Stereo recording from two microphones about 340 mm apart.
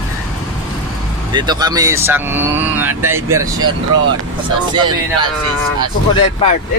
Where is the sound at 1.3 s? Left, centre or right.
Centre.